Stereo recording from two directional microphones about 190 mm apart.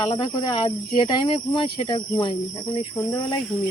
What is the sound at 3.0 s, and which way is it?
Speech, 15° left (ahead or behind).